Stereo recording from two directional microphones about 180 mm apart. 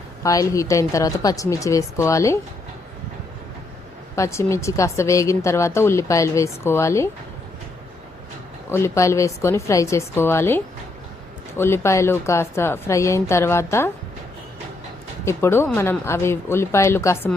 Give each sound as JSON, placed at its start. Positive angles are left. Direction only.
{"t": 0.2, "sound": "a woman's voice", "side_deg": 20}
{"t": 4.1, "sound": "a woman's voice", "side_deg": 15}
{"t": 8.7, "sound": "a woman's voice", "side_deg": 15}
{"t": 15.2, "sound": "a woman's voice", "side_deg": 15}